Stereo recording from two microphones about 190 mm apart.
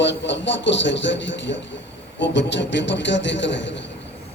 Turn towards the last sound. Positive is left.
turn(degrees=70)  # may be behind; listen again after turning